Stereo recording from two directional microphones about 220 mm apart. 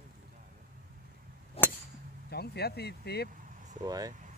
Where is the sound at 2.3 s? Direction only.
45° left (ahead or behind).